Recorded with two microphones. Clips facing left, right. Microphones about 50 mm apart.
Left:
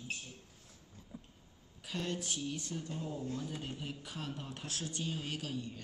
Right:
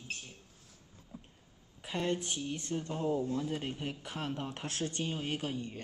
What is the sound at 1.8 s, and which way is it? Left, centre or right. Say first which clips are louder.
Speech: right 5 dB; right.